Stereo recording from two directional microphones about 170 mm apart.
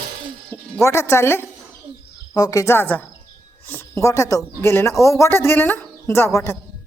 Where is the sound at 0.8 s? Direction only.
15° left (ahead or behind).